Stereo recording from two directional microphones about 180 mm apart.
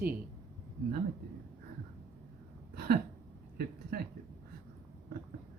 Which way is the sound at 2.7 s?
60° right (ahead or behind).